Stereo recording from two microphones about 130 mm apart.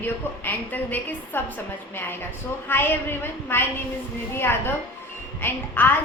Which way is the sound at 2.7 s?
15° left (ahead or behind).